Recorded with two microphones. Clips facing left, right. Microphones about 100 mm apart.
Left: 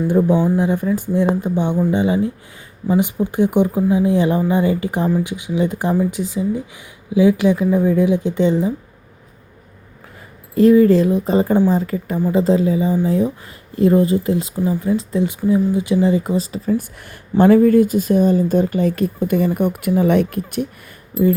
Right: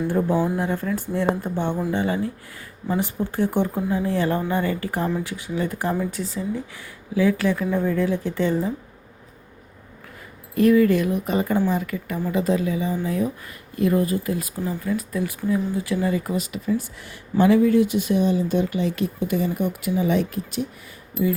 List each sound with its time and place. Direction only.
0.1 s speech: 20° left (ahead or behind)
10.5 s speech: 30° left (ahead or behind)
16.7 s speech: 55° left (ahead or behind)